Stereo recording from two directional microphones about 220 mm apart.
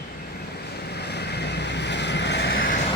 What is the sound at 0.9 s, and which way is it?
Vehicle, 50° left (ahead or behind).